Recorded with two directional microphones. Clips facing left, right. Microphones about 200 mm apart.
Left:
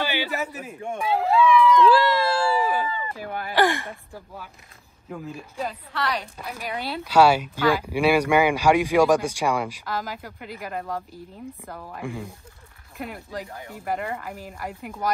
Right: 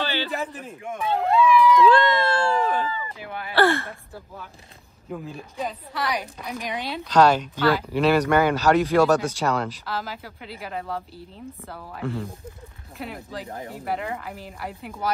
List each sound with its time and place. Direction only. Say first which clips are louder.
0.0 s a man's voice: even; 10° left (ahead or behind)
0.7 s speech: left 3 dB; 30° left (ahead or behind)
1.0 s speech: even; centre (ahead or behind)
3.2 s speech: left 3 dB; 40° left (ahead or behind)
3.5 s speech: right 2 dB; 15° left (ahead or behind)
5.1 s speech: right 1 dB; centre (ahead or behind)
13.5 s speech: right 4 dB; 35° right (ahead or behind)
13.8 s speech: left 1 dB; centre (ahead or behind)